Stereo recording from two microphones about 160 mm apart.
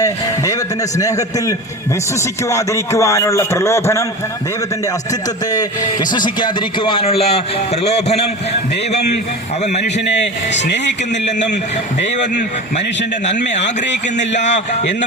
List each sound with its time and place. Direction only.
0.9 s a man's voice: 20° left (ahead or behind)
5.5 s a man's voice: 25° left (ahead or behind); by 8.2 s 40° left (ahead or behind)
8.9 s a man's voice: 90° left
10.5 s a man's voice: 90° left
13.6 s a man's voice: 90° left
14.2 s speech: 45° left (ahead or behind)